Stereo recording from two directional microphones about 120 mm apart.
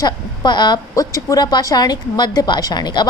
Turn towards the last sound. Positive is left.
turn(degrees=35)  # may be behind; listen again after turning